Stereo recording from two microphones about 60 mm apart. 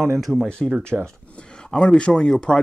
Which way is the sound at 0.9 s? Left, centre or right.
Centre.